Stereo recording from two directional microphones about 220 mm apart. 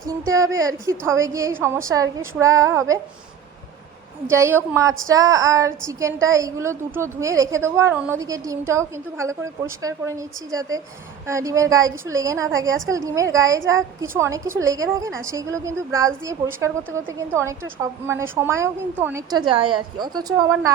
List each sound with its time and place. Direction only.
0.0 s speech: 15° right (ahead or behind)
4.3 s speech: 10° right (ahead or behind)